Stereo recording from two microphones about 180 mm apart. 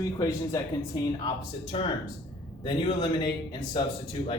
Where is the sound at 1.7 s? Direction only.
30° left (ahead or behind).